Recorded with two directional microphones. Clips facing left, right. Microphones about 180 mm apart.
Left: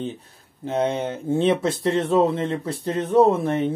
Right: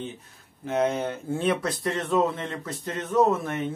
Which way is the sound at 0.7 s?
30° left (ahead or behind).